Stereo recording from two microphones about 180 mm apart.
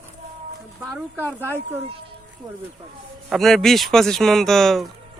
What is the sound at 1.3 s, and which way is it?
Speech, 10° right (ahead or behind).